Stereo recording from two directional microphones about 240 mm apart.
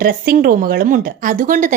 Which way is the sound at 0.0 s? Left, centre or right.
Right.